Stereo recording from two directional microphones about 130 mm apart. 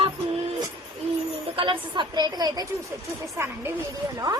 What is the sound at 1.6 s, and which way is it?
Speech, 40° right (ahead or behind).